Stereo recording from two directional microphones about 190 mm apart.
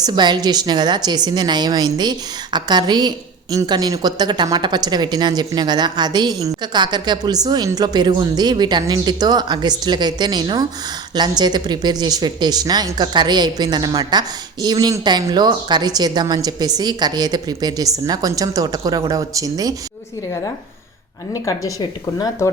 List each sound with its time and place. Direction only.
0.0 s a woman's voice: 20° right (ahead or behind)
21.3 s a woman's voice: 20° left (ahead or behind)